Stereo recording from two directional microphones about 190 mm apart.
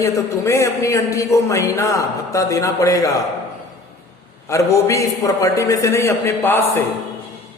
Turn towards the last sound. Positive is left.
turn(degrees=10)  # may be behind; listen again after turning